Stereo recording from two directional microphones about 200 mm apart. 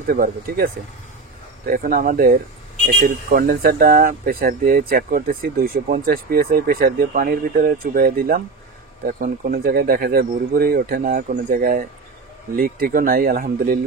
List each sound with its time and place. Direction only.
0.1 s speech: 50° right (ahead or behind)
1.7 s speech: 45° right (ahead or behind)